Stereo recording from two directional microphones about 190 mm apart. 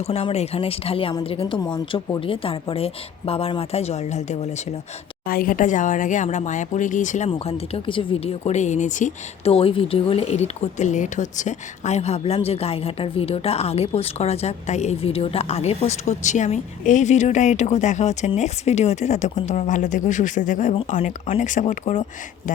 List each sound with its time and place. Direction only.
0.0 s speech: 35° left (ahead or behind)
5.2 s speech: 50° left (ahead or behind)